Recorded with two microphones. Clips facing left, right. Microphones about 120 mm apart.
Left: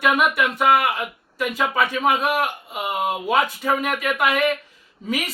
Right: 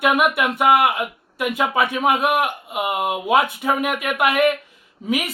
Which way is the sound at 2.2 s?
60° right (ahead or behind).